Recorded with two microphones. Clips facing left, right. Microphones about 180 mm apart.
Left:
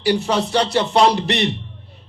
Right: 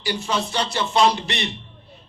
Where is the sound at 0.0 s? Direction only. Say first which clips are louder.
Left 7 dB; 65° left (ahead or behind).